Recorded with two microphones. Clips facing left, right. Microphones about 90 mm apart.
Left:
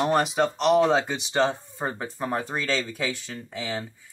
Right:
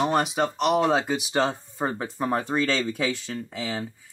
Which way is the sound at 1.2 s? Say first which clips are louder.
Left 1 dB; 25° left (ahead or behind).